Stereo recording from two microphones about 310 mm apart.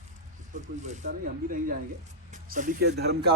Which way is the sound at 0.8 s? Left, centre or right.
Right.